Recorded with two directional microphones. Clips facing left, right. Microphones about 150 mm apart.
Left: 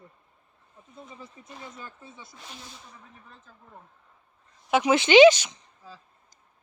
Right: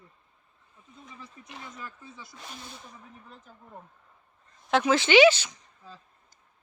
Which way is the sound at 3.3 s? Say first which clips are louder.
Right 3 dB; 15° right (ahead or behind).